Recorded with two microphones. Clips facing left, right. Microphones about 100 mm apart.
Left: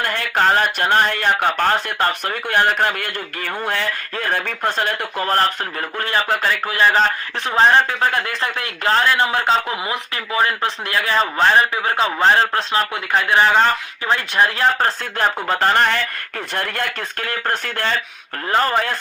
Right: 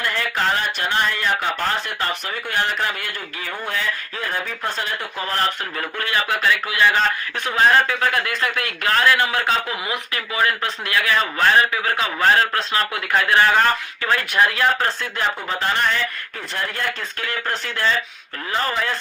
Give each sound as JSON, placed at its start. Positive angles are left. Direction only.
{"t": 0.0, "sound": "speech", "side_deg": 55}
{"t": 6.0, "sound": "speech", "side_deg": 35}
{"t": 15.0, "sound": "speech", "side_deg": 50}